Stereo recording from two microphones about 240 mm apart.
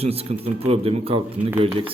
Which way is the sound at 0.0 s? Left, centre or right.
Right.